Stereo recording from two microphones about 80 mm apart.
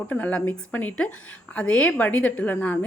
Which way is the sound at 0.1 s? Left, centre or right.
Centre.